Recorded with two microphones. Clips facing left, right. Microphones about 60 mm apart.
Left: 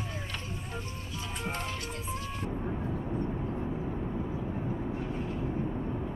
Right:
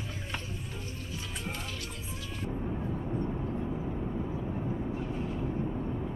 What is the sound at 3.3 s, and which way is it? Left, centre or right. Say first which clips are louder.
Vehicle: even; centre.